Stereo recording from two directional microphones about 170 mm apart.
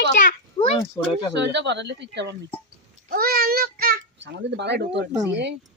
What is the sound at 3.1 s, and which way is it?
A child's voice, 60° right (ahead or behind).